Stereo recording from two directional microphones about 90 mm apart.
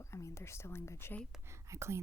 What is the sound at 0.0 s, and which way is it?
Speech, 35° left (ahead or behind).